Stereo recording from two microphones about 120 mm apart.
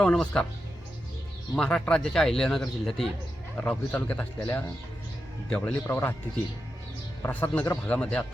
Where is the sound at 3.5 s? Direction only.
15° left (ahead or behind).